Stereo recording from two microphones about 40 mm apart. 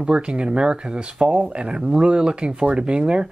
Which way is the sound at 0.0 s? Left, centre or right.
Right.